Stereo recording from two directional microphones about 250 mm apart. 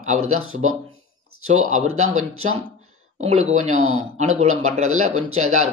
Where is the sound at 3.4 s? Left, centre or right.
Right.